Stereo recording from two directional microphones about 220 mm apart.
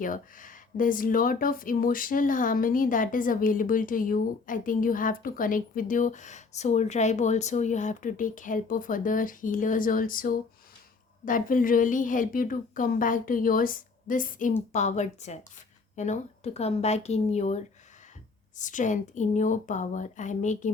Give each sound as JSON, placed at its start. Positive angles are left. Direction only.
{"t": 0.0, "sound": "speech", "side_deg": 40}